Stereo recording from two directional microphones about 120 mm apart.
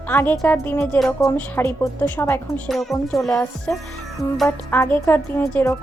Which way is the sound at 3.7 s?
10° left (ahead or behind).